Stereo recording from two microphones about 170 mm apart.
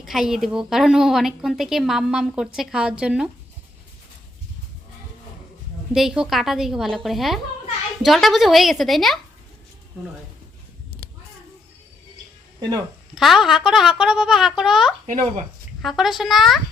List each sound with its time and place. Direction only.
0.0 s a woman's voice: centre (ahead or behind)
5.9 s a woman's voice: 5° right (ahead or behind)
12.5 s a sound: 25° right (ahead or behind)
13.1 s a woman's voice: centre (ahead or behind)
15.0 s speech: 40° right (ahead or behind)
15.8 s a woman's voice: centre (ahead or behind)